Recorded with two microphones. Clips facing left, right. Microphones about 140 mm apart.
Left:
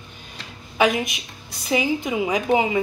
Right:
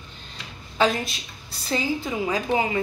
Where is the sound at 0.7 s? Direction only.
10° left (ahead or behind).